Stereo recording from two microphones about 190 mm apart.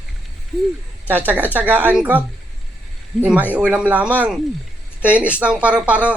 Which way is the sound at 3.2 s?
10° right (ahead or behind).